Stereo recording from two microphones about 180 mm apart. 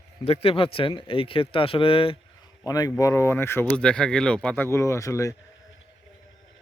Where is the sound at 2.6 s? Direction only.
20° left (ahead or behind).